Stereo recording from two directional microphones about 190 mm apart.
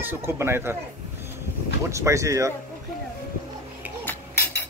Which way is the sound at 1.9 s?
15° right (ahead or behind).